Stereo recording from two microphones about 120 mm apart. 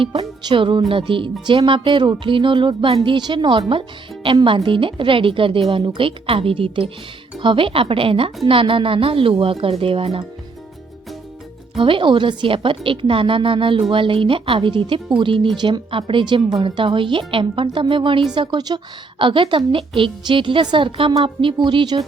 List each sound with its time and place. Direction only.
0.0 s speech: 55° right (ahead or behind)
11.8 s speech: 45° right (ahead or behind)